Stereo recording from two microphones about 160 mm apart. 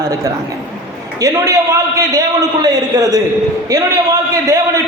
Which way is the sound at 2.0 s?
25° right (ahead or behind).